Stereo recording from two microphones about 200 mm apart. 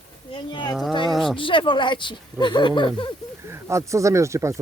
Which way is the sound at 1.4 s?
25° left (ahead or behind).